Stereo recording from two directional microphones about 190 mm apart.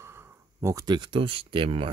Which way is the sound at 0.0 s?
15° right (ahead or behind).